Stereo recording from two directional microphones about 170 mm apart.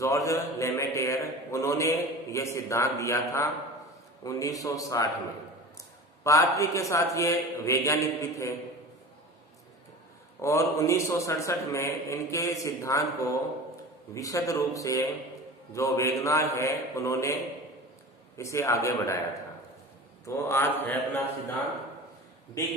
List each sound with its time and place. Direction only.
0.0 s a man's voice: 20° left (ahead or behind)
6.2 s a man's voice: 20° left (ahead or behind)
10.4 s a man's voice: 15° left (ahead or behind)
14.1 s a man's voice: 20° left (ahead or behind)
18.4 s a man's voice: 15° left (ahead or behind)
20.2 s a man's voice: 15° left (ahead or behind)